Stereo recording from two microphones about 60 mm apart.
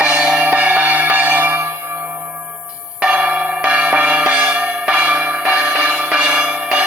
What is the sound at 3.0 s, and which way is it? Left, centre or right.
Music, right.